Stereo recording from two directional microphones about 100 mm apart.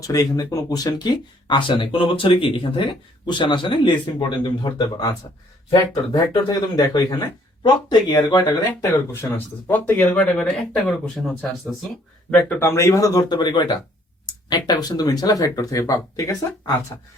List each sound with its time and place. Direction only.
0.1 s speech: 35° left (ahead or behind)
7.6 s speech: 50° left (ahead or behind)
8.4 s speech: 30° left (ahead or behind)
9.3 s speech: 20° left (ahead or behind); by 11.7 s 5° left (ahead or behind)
12.3 s speech: 15° left (ahead or behind)
12.6 s speech: 30° left (ahead or behind)
13.3 s speech: 45° left (ahead or behind)